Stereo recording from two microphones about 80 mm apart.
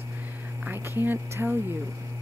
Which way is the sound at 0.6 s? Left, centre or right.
Right.